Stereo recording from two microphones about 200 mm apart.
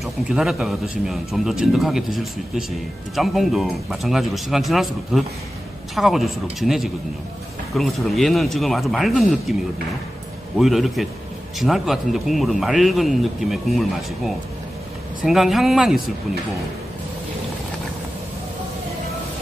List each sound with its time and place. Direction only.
0.0 s speech: centre (ahead or behind)
10.6 s speech: centre (ahead or behind)